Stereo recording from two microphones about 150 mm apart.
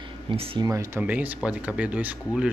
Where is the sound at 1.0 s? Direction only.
10° right (ahead or behind).